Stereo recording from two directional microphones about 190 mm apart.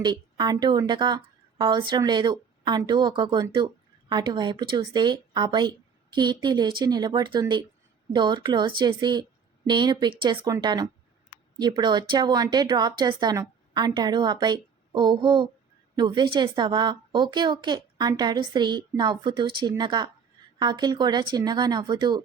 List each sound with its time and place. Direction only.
0.0 s speech: 20° right (ahead or behind)